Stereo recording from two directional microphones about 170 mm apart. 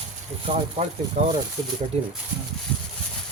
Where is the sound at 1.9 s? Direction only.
40° right (ahead or behind).